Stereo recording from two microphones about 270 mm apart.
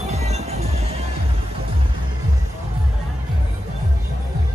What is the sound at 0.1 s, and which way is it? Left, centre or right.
Music, right.